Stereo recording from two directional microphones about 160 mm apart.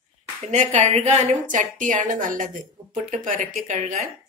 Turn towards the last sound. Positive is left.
turn(degrees=-45)  # may be behind; listen again after turning